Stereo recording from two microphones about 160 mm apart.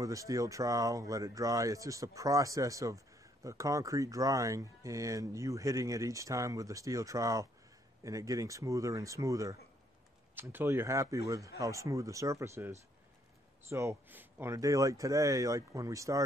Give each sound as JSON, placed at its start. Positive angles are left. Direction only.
{"t": 0.0, "sound": "speech", "side_deg": -20}